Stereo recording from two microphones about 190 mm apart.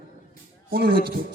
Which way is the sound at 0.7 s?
55° right (ahead or behind).